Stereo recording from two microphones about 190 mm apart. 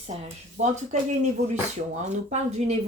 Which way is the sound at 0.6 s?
40° right (ahead or behind).